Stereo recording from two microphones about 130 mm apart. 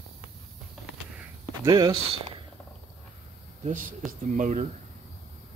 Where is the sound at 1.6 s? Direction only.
30° right (ahead or behind).